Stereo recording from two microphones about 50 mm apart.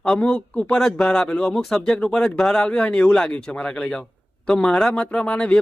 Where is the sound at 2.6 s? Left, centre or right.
Left.